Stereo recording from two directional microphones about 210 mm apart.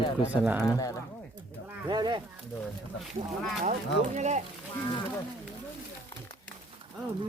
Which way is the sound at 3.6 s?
35° right (ahead or behind).